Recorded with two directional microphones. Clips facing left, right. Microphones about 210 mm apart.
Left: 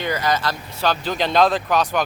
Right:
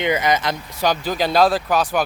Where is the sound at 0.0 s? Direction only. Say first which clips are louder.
Right 3 dB; 20° right (ahead or behind).